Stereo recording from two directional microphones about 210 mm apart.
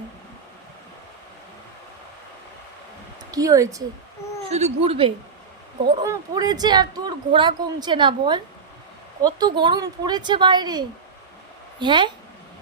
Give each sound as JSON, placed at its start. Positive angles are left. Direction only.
{"t": 3.3, "sound": "speech", "side_deg": -15}
{"t": 4.5, "sound": "speech", "side_deg": -30}